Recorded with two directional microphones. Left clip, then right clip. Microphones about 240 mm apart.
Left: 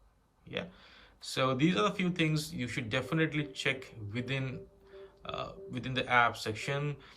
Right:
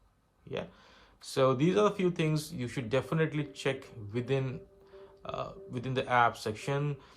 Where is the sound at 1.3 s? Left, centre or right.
Centre.